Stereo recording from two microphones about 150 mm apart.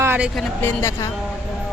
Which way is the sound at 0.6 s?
15° left (ahead or behind).